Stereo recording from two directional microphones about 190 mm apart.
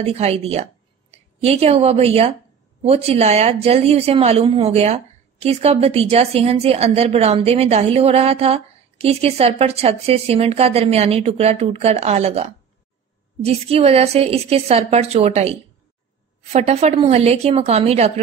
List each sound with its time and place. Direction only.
0.0 s a woman's voice: 30° right (ahead or behind)
16.5 s a woman's voice: 35° right (ahead or behind)